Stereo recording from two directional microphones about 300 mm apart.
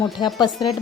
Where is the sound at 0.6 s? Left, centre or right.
Centre.